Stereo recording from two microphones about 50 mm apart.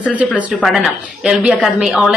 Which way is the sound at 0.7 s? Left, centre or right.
Centre.